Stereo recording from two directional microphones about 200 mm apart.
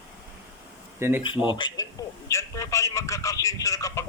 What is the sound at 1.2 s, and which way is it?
Speech, 25° left (ahead or behind).